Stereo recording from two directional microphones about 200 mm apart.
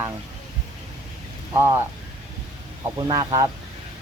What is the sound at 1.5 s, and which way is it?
Speech, 10° right (ahead or behind).